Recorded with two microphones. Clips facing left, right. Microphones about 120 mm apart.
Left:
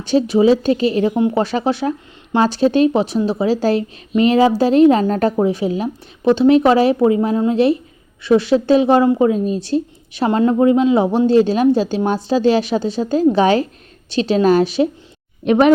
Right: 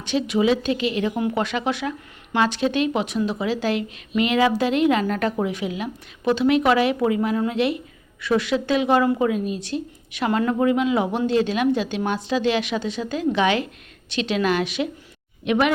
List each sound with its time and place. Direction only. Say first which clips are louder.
0.0 s a woman's voice: left 7 dB; 35° left (ahead or behind)